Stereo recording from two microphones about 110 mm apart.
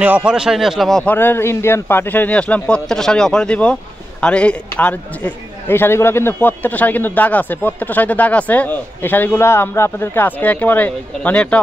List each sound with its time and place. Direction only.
0.0 s speech: 10° right (ahead or behind)
1.0 s a man's voice: 20° left (ahead or behind)